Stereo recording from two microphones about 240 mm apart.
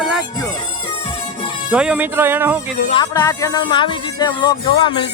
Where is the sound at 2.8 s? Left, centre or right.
Centre.